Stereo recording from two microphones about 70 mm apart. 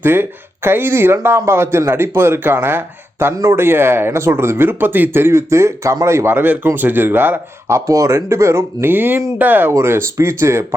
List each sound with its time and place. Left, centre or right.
0.0 s speech: right
7.7 s speech: right
9.7 s speech: right